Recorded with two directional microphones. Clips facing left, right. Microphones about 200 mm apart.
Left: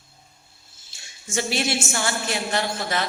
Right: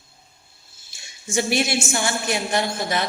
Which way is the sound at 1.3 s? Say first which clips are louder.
Right 3 dB; 15° right (ahead or behind).